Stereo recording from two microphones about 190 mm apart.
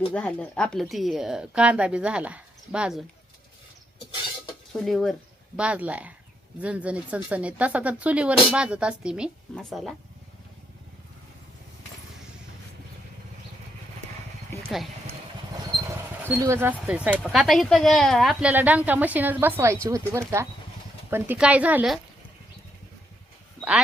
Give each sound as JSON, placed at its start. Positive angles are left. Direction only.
{"t": 0.1, "sound": "speech", "side_deg": 5}
{"t": 4.7, "sound": "speech", "side_deg": 0}
{"t": 14.5, "sound": "a sound", "side_deg": 15}
{"t": 16.2, "sound": "speech", "side_deg": -15}
{"t": 23.6, "sound": "dog", "side_deg": -5}